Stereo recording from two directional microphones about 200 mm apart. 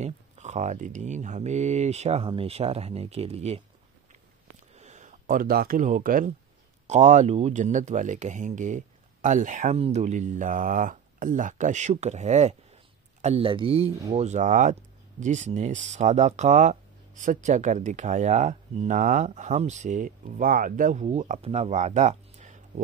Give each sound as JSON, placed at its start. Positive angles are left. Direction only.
{"t": 0.0, "sound": "speech", "side_deg": -35}
{"t": 4.7, "sound": "speech", "side_deg": -35}